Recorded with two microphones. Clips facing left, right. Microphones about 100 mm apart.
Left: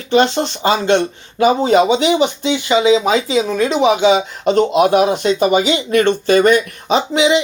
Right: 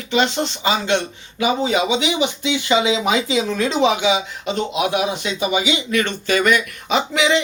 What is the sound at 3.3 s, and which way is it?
Speech, 20° left (ahead or behind).